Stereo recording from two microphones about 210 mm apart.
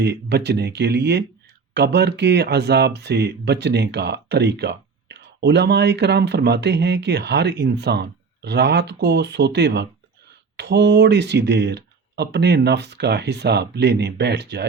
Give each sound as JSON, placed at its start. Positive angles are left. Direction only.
{"t": 0.0, "sound": "speech", "side_deg": -50}